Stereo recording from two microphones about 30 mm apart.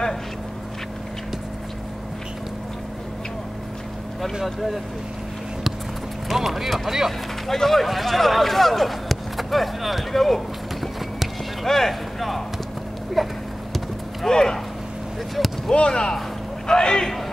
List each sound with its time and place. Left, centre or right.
6.2 s speech: centre
7.5 s speech: centre
13.2 s a sound: centre
14.3 s speech: centre
15.3 s a sound: centre
15.9 s a man's voice: left